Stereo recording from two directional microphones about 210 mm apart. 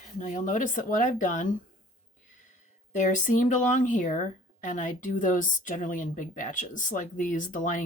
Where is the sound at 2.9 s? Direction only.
35° left (ahead or behind).